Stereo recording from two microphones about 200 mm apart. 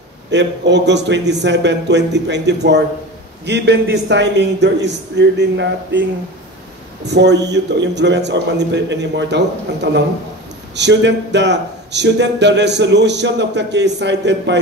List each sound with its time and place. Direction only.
0.3 s a man's voice: 60° right (ahead or behind)
7.1 s a man's voice: 55° right (ahead or behind)